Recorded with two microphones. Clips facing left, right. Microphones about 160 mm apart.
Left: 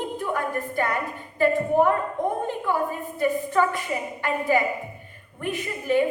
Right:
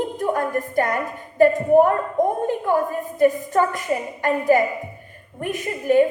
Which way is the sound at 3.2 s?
45° right (ahead or behind).